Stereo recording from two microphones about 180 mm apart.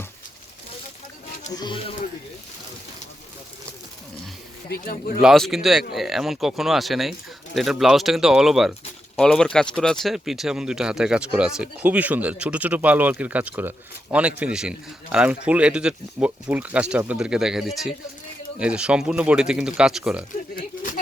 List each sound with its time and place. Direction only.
1.5 s speech: 25° left (ahead or behind)
4.9 s speech: 55° left (ahead or behind)
5.2 s speech: centre (ahead or behind)
20.6 s a sound: 45° left (ahead or behind)